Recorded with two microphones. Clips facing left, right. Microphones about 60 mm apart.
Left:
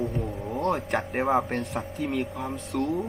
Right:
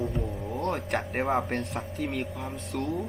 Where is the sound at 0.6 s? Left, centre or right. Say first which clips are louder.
Left 4 dB; left.